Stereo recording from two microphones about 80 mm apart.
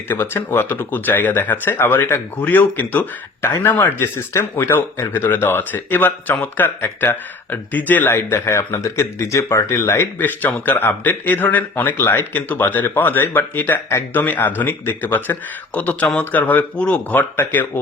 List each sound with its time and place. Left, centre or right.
0.1 s speech: left
8.3 s speech: left
10.2 s speech: left